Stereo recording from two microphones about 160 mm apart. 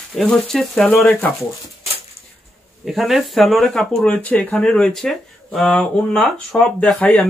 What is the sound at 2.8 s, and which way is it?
Speech, centre (ahead or behind).